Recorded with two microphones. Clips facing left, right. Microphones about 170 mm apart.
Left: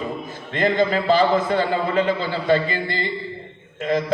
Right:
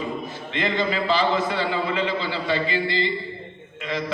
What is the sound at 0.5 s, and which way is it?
A man's voice, 50° left (ahead or behind).